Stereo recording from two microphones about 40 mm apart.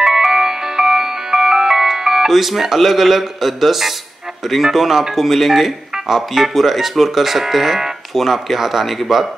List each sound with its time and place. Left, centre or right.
0.0 s music: centre
4.5 s speech: centre